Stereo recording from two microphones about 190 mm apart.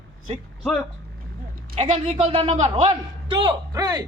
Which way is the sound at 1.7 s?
35° right (ahead or behind).